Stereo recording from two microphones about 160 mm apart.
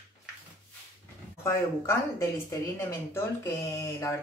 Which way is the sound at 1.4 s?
20° left (ahead or behind).